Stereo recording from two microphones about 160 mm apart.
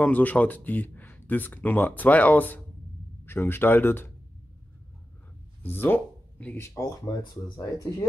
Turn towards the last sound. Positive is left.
turn(degrees=20)  # may be behind; listen again after turning